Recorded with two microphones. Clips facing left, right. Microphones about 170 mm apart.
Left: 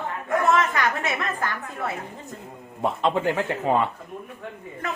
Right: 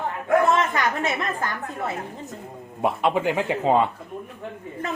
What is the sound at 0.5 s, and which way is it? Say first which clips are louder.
A woman's voice: even; 25° right (ahead or behind).